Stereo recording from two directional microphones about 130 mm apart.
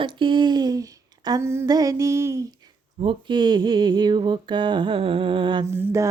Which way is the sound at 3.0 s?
40° right (ahead or behind).